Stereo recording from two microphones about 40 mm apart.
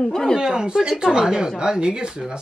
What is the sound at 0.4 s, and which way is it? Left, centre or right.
Speech, centre.